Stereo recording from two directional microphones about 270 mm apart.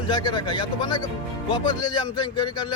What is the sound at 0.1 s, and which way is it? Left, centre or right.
A man's voice, centre.